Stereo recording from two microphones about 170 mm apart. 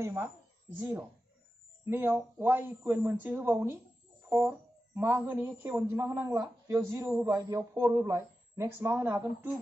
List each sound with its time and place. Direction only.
0.0 s a woman's voice: 15° right (ahead or behind)